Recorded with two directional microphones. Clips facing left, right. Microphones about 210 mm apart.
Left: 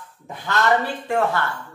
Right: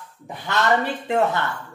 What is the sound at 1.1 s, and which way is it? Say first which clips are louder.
Speech: right 1 dB; 20° right (ahead or behind).